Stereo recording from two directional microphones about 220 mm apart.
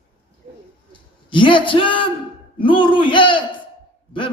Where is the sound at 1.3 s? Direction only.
20° left (ahead or behind).